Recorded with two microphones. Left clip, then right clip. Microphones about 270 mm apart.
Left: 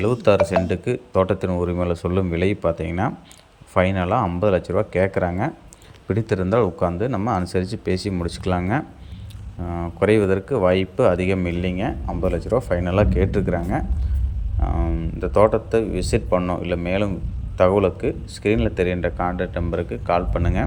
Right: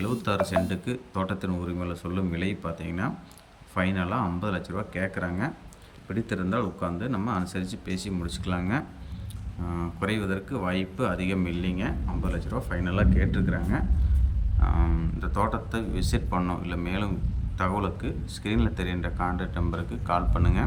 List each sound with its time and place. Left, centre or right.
0.0 s speech: centre
14.6 s speech: centre